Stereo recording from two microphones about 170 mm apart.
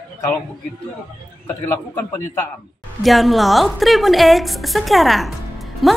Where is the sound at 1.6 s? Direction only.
15° left (ahead or behind).